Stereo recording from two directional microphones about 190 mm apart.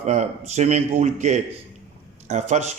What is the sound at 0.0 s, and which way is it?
Speech, 35° right (ahead or behind).